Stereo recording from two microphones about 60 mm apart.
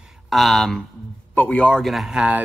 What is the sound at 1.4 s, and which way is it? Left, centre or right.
Speech, left.